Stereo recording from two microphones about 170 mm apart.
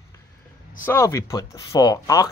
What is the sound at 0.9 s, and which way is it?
Speech, 15° left (ahead or behind).